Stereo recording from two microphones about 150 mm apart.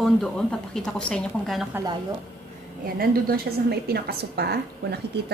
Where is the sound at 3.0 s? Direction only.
90° right.